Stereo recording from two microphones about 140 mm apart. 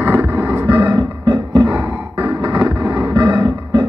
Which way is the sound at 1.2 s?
30° right (ahead or behind).